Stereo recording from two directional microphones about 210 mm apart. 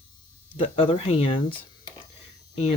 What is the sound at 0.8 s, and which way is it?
Speech, 30° left (ahead or behind).